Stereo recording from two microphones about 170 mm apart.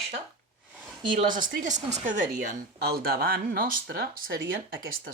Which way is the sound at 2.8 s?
65° right (ahead or behind).